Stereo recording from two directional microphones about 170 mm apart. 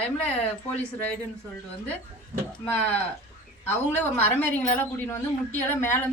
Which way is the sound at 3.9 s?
10° left (ahead or behind).